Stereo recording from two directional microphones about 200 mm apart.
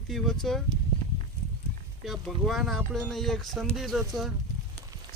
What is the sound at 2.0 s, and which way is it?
Speech, centre (ahead or behind).